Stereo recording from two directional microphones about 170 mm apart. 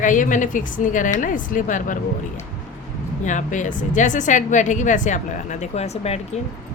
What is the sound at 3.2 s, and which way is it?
A woman's voice, 45° left (ahead or behind).